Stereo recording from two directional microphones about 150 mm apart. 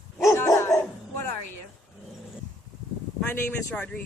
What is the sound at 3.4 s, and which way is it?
Speech, 10° left (ahead or behind).